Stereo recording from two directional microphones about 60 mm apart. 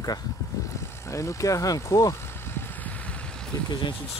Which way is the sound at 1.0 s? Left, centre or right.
Left.